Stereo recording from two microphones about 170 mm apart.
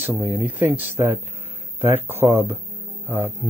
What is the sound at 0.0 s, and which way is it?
Speech, 10° right (ahead or behind).